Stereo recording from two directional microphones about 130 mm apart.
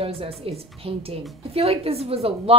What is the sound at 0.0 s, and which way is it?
Speech, 45° right (ahead or behind).